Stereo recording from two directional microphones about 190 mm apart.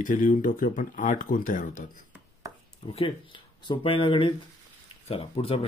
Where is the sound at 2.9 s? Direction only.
25° left (ahead or behind).